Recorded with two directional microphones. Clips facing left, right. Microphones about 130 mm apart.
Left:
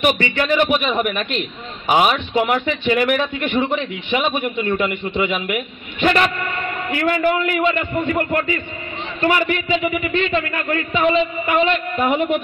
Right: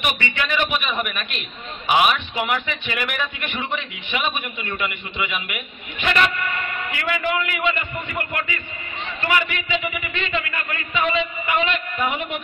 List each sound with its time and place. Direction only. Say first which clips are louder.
0.0 s a man's voice: left 7 dB; 40° left (ahead or behind)